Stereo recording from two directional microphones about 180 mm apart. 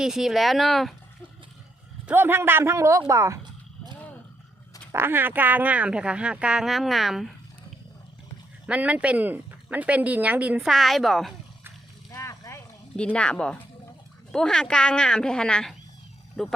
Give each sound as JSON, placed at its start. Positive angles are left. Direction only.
{"t": 0.0, "sound": "a woman's voice", "side_deg": 0}
{"t": 2.0, "sound": "speech", "side_deg": -10}
{"t": 4.9, "sound": "speech", "side_deg": -10}
{"t": 8.6, "sound": "speech", "side_deg": -5}
{"t": 12.1, "sound": "a sound", "side_deg": 15}
{"t": 13.1, "sound": "a woman's voice", "side_deg": 5}